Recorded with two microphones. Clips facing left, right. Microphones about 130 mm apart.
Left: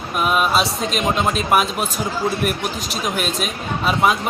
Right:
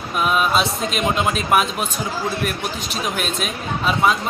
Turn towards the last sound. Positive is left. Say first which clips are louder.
# left 1 dB
turn(degrees=5)  # may be behind; listen again after turning